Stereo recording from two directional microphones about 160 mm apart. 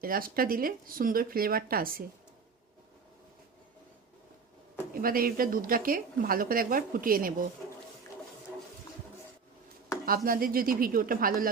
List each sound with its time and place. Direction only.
0.0 s speech: 65° right (ahead or behind)
4.9 s speech: 65° right (ahead or behind)
10.1 s speech: 65° right (ahead or behind)